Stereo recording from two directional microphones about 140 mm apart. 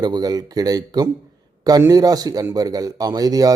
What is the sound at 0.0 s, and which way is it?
A man's voice, 30° right (ahead or behind).